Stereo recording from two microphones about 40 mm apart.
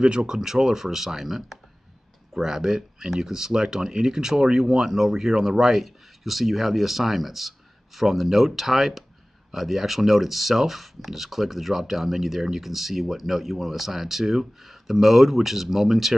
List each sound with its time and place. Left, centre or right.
0.0 s speech: right; by 16.2 s centre